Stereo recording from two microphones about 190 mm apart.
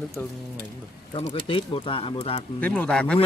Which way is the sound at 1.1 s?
30° left (ahead or behind).